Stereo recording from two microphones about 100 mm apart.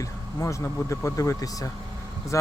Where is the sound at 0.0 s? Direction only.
30° left (ahead or behind).